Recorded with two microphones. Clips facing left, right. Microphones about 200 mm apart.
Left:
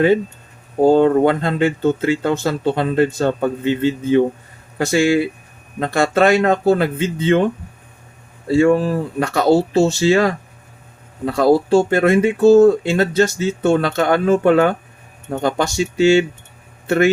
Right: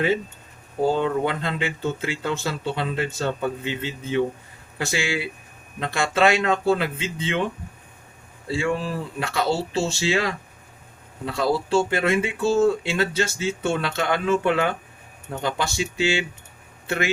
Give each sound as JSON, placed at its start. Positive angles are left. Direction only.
{"t": 0.8, "sound": "speech", "side_deg": 50}